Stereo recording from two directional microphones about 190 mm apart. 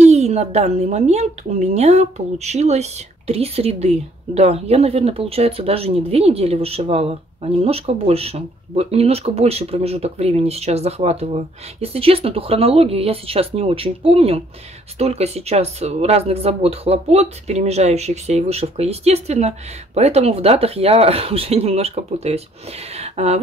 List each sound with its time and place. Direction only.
0.0 s speech: 35° right (ahead or behind)